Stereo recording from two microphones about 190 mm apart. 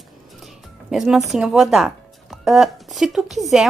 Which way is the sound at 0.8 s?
Centre (ahead or behind).